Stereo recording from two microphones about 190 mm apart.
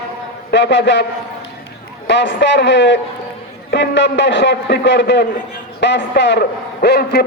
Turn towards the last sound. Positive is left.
turn(degrees=60)  # may be behind; listen again after turning